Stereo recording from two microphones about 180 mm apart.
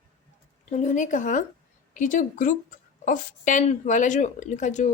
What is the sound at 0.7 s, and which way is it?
A woman's voice, 40° left (ahead or behind).